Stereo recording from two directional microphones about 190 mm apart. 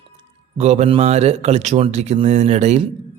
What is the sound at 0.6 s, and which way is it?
Speech, 35° right (ahead or behind).